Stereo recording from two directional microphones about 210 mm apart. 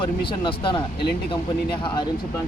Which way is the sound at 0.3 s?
25° left (ahead or behind).